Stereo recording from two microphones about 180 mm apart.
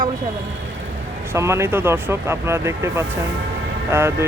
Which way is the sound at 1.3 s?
15° right (ahead or behind).